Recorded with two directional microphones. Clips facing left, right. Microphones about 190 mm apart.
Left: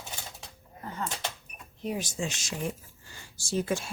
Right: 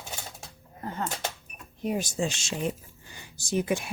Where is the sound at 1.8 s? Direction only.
50° right (ahead or behind).